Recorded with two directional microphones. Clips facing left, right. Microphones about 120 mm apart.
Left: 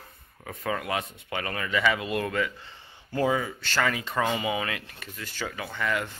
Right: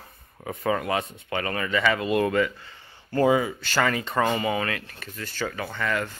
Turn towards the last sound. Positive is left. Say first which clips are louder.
# right 2 dB
turn(degrees=10)  # may be behind; listen again after turning